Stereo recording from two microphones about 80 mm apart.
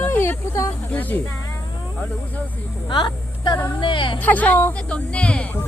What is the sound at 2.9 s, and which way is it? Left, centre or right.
Speech, left.